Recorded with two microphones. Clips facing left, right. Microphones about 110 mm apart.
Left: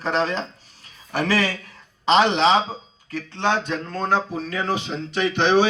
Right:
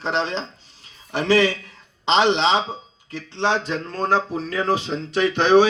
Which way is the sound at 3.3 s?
30° right (ahead or behind).